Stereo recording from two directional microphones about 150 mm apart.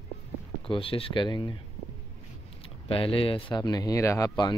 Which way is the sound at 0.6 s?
40° left (ahead or behind).